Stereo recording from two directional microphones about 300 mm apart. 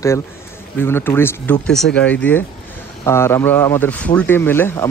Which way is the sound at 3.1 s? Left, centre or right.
Centre.